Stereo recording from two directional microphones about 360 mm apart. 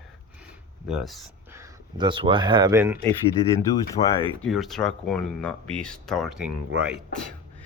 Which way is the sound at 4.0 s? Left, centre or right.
Centre.